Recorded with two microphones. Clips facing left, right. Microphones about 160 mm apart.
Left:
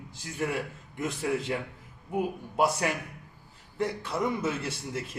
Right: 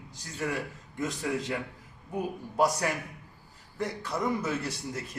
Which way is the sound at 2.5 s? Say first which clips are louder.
Even; 25° left (ahead or behind).